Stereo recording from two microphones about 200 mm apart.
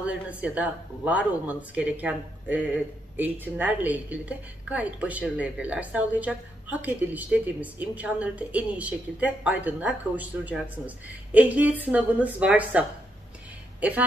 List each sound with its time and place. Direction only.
0.0 s speech: 5° right (ahead or behind)